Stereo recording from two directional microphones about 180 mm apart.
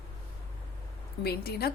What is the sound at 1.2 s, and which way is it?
Speech, 60° left (ahead or behind).